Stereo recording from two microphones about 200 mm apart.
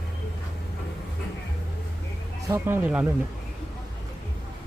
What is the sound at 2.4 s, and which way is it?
Speech, 15° right (ahead or behind).